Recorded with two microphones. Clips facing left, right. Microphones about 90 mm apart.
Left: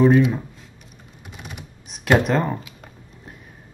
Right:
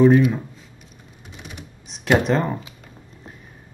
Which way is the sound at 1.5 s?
5° left (ahead or behind).